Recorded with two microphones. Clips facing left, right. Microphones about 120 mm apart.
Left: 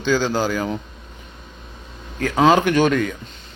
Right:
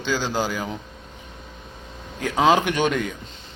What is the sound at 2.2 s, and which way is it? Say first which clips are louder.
Speech: left 3 dB; 15° right (ahead or behind).